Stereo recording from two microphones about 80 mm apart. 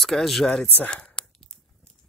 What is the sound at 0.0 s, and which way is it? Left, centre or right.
Speech, centre.